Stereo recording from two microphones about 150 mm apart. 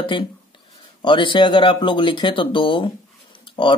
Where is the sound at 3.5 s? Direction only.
35° left (ahead or behind).